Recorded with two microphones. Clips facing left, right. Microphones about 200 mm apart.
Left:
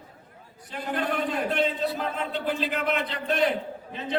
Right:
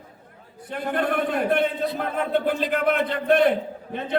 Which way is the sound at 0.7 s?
55° right (ahead or behind).